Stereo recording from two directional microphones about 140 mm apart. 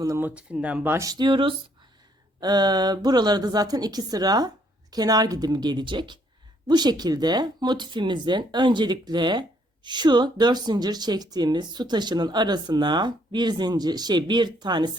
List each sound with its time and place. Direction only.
0.2 s a woman's voice: 10° right (ahead or behind); by 14.9 s 30° right (ahead or behind)